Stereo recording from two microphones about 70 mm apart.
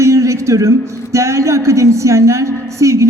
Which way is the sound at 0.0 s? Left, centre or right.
Right.